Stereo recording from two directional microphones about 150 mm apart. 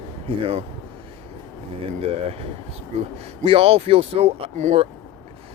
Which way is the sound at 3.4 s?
40° right (ahead or behind).